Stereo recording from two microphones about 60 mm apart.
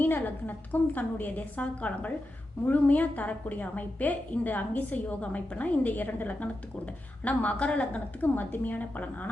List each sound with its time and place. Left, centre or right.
0.0 s a woman's voice: left